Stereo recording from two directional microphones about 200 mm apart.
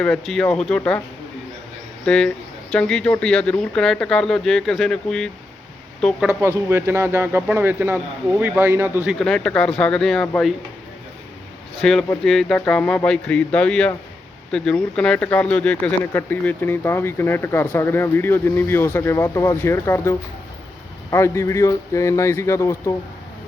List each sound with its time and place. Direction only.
0.0 s speech: 5° left (ahead or behind)
2.0 s a woman's voice: 5° left (ahead or behind)
6.7 s speech: 10° right (ahead or behind)
9.1 s speech: 5° left (ahead or behind)
11.8 s speech: centre (ahead or behind)